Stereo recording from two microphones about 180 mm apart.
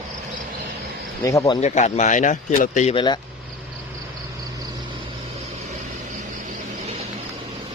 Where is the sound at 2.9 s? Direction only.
25° left (ahead or behind).